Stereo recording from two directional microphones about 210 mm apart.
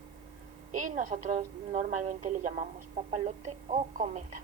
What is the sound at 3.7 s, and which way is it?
Speech, 35° right (ahead or behind).